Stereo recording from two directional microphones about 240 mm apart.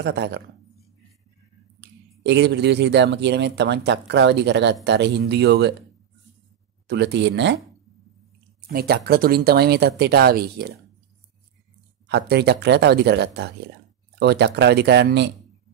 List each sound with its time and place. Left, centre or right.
0.0 s speech: right
1.8 s speech: right
6.9 s speech: right
8.5 s speech: right
12.1 s speech: right